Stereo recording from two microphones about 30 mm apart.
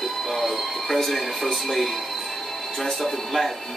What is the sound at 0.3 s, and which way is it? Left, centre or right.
Music, centre.